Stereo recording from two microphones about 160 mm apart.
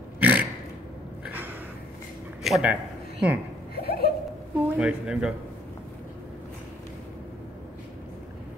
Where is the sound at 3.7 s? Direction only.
75° left (ahead or behind).